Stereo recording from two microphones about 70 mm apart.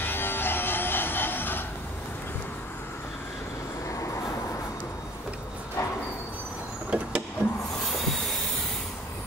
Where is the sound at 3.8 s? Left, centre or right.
Left.